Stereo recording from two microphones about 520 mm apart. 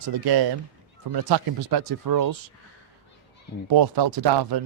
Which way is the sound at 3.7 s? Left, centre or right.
Right.